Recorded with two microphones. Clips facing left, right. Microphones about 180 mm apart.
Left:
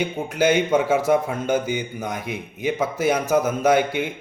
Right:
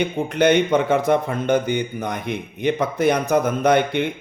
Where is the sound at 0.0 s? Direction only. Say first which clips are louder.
Right 3 dB; 5° left (ahead or behind).